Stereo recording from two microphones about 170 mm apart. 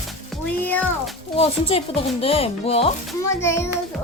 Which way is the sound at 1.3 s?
35° left (ahead or behind).